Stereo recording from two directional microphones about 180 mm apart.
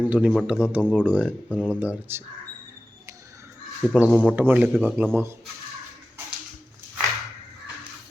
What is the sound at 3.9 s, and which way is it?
Speech, centre (ahead or behind).